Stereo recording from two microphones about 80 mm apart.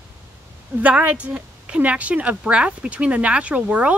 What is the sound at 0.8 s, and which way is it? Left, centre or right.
A woman's voice, centre.